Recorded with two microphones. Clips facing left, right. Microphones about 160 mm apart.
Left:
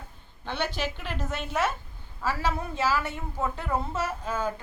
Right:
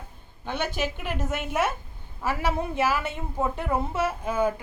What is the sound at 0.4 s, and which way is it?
A woman's voice, 10° right (ahead or behind).